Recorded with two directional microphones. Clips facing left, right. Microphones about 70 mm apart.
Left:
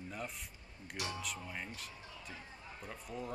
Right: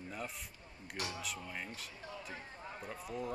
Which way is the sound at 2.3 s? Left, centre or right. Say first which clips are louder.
Right 3 dB; right.